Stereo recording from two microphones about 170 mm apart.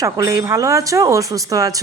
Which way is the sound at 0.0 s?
20° right (ahead or behind).